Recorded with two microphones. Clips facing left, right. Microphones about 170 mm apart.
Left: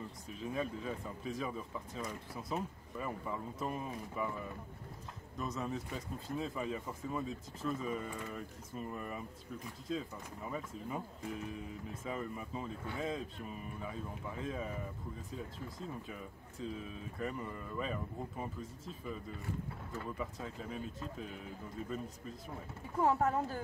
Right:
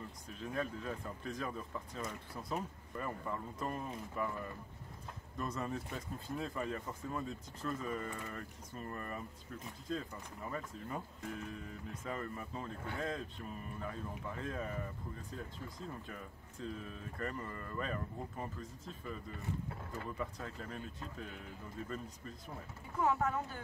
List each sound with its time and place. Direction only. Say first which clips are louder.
0.3 s speech: left 1 dB; 5° left (ahead or behind)
16.1 s speech: left 2 dB; 5° left (ahead or behind)
20.2 s speech: left 1 dB; centre (ahead or behind)
22.9 s speech: left 3 dB; 35° left (ahead or behind)